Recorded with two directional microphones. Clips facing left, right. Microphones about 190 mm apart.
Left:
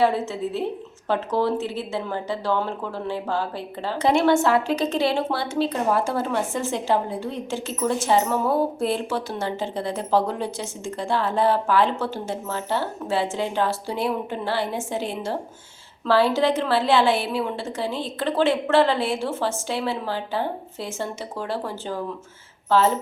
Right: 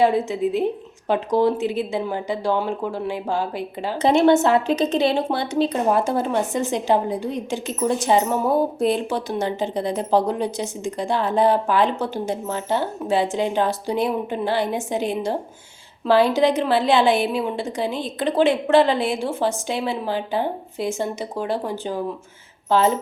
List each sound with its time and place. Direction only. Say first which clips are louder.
0.0 s speech: right 3 dB; 15° right (ahead or behind)